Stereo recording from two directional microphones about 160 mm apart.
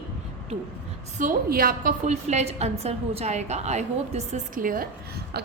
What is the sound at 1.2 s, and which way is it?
Speech, 65° right (ahead or behind).